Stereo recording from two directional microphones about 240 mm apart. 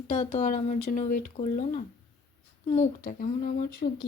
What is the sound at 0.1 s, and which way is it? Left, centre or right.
A woman's voice, left.